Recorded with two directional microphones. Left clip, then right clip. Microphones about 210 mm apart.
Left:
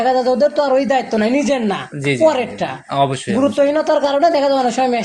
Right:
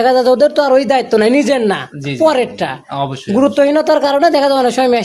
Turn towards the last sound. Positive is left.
turn(degrees=-55)  # may be behind; listen again after turning